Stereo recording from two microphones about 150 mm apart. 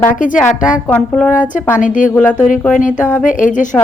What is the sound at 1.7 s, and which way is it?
Speech, 60° left (ahead or behind).